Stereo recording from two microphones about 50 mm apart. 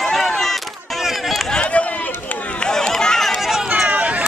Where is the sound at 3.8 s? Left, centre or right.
Right.